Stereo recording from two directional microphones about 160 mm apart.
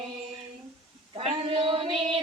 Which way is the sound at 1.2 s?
35° right (ahead or behind).